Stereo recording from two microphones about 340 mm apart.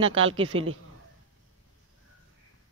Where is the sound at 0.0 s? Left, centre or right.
Right.